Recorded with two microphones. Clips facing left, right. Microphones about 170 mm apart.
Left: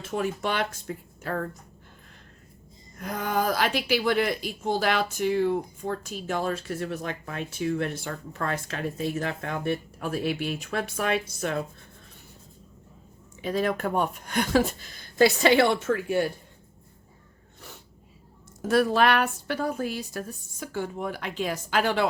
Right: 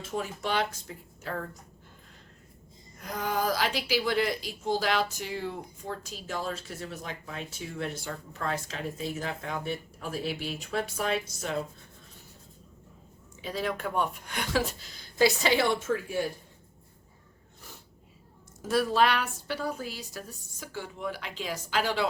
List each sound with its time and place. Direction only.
0.2 s a woman's voice: 60° left (ahead or behind)
3.0 s a woman's voice: 55° left (ahead or behind)
13.4 s a woman's voice: 50° left (ahead or behind)
18.6 s a woman's voice: 60° left (ahead or behind)